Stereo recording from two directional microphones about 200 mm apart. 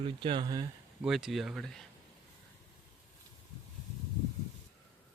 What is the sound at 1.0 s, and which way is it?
Speech, centre (ahead or behind).